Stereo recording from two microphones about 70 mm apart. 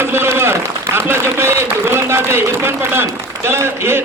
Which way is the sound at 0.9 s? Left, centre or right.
Right.